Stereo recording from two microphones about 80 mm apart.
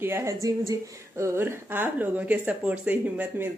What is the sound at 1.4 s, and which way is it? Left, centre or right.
Speech, right.